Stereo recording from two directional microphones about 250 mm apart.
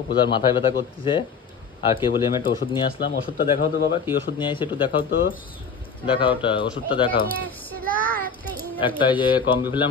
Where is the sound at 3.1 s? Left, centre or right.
Left.